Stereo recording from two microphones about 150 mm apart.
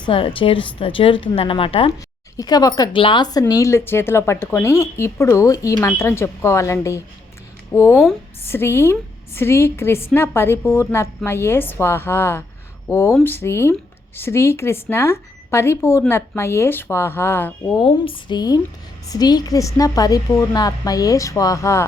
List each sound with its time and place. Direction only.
0.0 s speech: 35° left (ahead or behind)
1.9 s a woman's voice: 25° left (ahead or behind)
17.7 s a woman's voice: 35° left (ahead or behind); by 21.8 s 20° left (ahead or behind)